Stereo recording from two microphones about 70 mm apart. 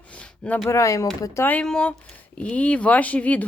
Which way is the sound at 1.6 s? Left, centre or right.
Centre.